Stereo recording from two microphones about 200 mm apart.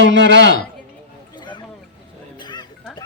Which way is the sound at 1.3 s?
20° left (ahead or behind).